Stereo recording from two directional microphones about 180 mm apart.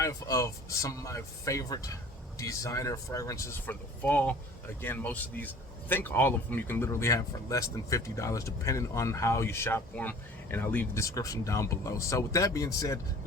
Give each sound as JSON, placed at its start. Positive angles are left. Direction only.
{"t": 0.0, "sound": "speech", "side_deg": 20}